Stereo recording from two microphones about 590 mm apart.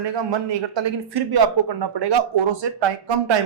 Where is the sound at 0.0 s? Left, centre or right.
Right.